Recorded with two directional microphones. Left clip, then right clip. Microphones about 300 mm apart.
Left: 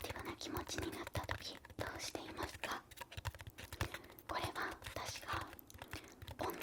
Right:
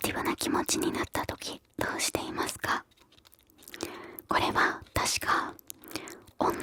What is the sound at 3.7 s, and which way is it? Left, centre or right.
Whispering, right.